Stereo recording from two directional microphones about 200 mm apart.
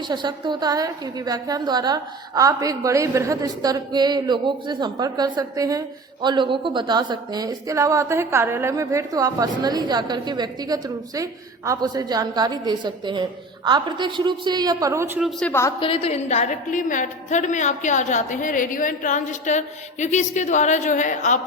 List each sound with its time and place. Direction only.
0.1 s a woman's voice: 20° right (ahead or behind)
15.4 s a woman's voice: 10° left (ahead or behind)
15.8 s a woman's voice: 30° left (ahead or behind)